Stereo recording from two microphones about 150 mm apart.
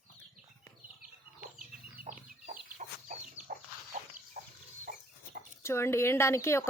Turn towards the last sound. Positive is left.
turn(degrees=20)  # may be behind; listen again after turning